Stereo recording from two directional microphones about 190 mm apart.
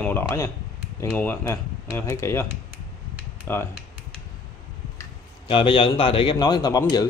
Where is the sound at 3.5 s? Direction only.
10° left (ahead or behind).